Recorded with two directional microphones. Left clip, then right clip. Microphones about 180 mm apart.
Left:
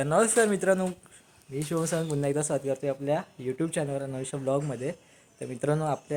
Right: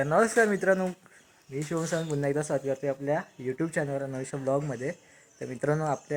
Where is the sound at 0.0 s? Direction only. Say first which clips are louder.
Even; centre (ahead or behind).